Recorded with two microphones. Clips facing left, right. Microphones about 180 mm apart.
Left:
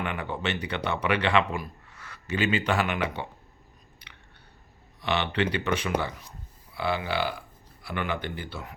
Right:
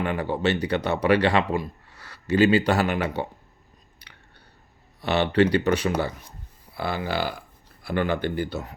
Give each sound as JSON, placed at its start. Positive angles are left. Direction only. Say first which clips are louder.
{"t": 0.0, "sound": "speech", "louder": "right 7 dB", "side_deg": -35}
{"t": 5.0, "sound": "speech", "louder": "right 7 dB", "side_deg": -40}